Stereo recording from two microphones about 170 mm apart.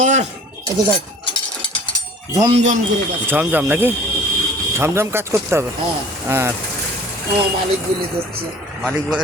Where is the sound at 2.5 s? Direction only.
45° right (ahead or behind).